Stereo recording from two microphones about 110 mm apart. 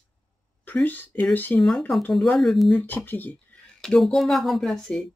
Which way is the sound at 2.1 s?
Centre (ahead or behind).